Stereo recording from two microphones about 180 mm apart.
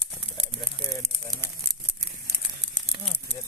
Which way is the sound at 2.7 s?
25° right (ahead or behind).